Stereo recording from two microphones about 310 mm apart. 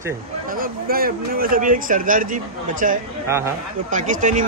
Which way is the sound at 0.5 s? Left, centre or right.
Right.